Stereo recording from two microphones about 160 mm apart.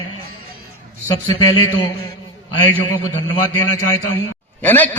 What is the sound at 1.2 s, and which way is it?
Speech, 30° left (ahead or behind).